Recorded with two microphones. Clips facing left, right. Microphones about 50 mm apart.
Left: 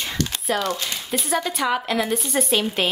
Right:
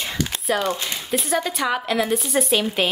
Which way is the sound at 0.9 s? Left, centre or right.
Centre.